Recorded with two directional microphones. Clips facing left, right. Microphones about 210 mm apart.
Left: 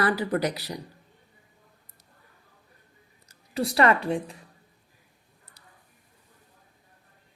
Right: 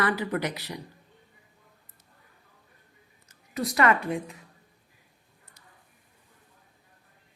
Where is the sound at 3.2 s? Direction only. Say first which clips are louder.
Left 3 dB; 30° left (ahead or behind).